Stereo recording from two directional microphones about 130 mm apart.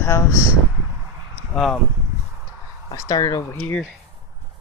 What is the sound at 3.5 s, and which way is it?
Speech, 10° left (ahead or behind).